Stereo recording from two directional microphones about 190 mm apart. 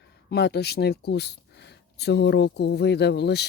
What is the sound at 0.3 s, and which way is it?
Speech, 60° left (ahead or behind).